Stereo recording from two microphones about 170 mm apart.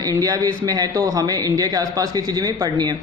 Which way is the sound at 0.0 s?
20° right (ahead or behind).